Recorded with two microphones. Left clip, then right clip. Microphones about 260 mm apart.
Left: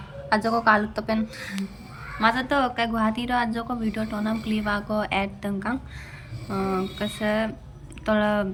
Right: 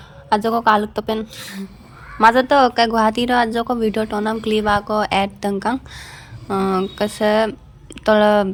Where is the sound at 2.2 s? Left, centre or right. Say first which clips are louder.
Right 10 dB; centre.